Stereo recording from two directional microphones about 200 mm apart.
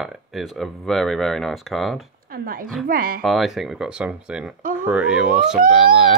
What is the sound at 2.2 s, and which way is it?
Speech, 45° right (ahead or behind).